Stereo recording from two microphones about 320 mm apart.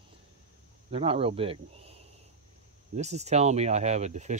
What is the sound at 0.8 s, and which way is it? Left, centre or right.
Speech, centre.